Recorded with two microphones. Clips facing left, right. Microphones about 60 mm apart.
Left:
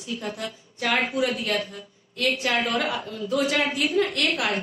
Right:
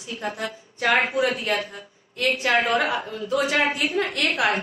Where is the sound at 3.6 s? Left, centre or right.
Right.